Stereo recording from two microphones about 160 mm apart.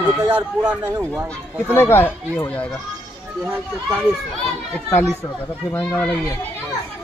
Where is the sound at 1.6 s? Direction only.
15° left (ahead or behind).